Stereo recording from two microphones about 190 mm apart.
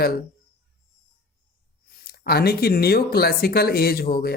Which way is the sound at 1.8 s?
50° left (ahead or behind).